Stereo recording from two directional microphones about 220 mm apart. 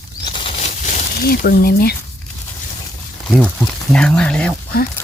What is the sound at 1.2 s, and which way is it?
Speech, 45° left (ahead or behind).